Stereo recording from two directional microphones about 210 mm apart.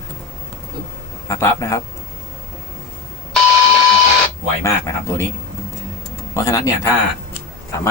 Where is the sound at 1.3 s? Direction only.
15° left (ahead or behind).